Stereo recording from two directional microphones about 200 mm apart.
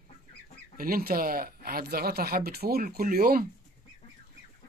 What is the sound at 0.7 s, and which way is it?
Speech, 45° right (ahead or behind).